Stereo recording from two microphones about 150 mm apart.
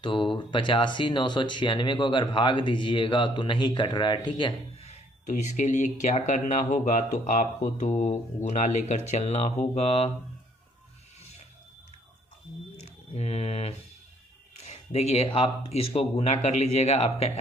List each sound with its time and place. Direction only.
0.0 s speech: 35° left (ahead or behind)
4.8 s speech: 50° left (ahead or behind)
12.8 s speech: 45° left (ahead or behind)